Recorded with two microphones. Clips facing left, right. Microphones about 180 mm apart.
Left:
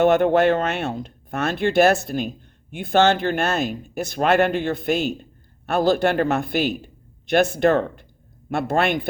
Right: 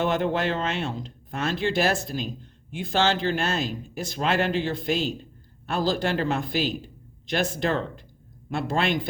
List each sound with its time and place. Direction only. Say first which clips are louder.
0.0 s speech: left 8 dB; 60° left (ahead or behind)